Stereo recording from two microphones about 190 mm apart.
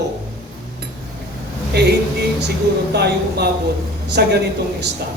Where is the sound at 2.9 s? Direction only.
60° right (ahead or behind).